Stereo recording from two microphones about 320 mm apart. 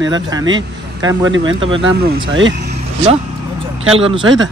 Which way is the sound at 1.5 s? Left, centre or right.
Centre.